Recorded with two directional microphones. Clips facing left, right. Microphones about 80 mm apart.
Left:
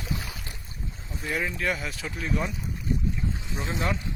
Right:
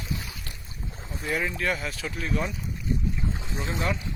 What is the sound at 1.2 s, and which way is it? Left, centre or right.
Speech, centre.